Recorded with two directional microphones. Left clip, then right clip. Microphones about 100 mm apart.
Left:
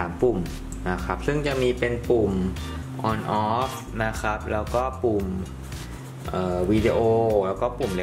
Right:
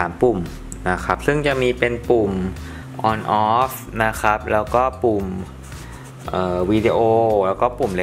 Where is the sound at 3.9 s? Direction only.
45° right (ahead or behind).